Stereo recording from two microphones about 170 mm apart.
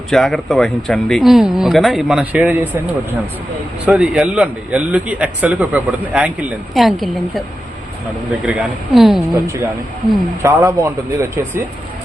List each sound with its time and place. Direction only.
0.1 s speech: centre (ahead or behind)
3.8 s a man's voice: 5° right (ahead or behind)
8.4 s speech: centre (ahead or behind)
9.3 s a man's voice: 20° right (ahead or behind)